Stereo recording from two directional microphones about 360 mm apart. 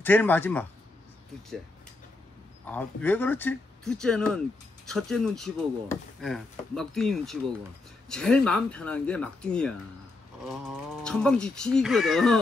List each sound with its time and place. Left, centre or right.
0.0 s speech: centre
2.6 s speech: centre